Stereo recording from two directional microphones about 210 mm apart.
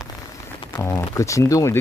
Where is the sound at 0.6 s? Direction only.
15° left (ahead or behind).